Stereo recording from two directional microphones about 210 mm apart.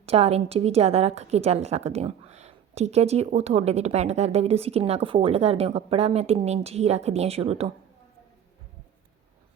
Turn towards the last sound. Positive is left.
turn(degrees=-30)  # may be behind; listen again after turning